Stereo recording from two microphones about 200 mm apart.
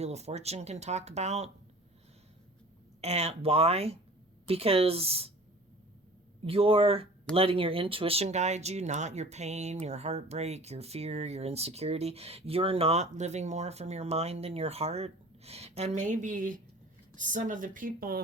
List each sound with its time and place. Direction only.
0.0 s speech: 35° right (ahead or behind)
3.0 s speech: 30° right (ahead or behind)
6.4 s speech: 30° right (ahead or behind); by 18.2 s 45° right (ahead or behind)